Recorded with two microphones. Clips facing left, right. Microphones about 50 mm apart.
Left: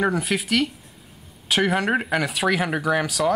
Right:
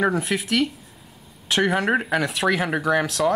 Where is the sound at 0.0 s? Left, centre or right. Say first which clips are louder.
Right 1 dB; centre.